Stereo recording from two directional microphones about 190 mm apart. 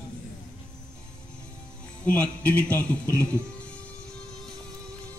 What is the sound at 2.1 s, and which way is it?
A man's voice, 10° left (ahead or behind).